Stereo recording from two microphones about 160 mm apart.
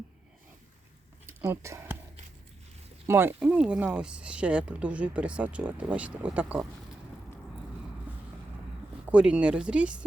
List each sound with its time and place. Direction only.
1.3 s a sound: 15° right (ahead or behind)
3.1 s speech: 15° right (ahead or behind)
8.1 s vehicle: 10° right (ahead or behind)
9.0 s speech: 5° right (ahead or behind)